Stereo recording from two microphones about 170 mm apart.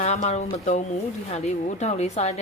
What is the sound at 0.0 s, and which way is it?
Speech, 40° left (ahead or behind).